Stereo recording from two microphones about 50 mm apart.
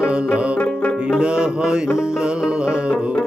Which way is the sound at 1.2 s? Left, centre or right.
Centre.